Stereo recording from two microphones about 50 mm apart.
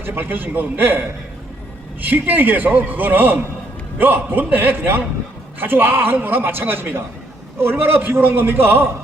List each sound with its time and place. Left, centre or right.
0.0 s a man's voice: right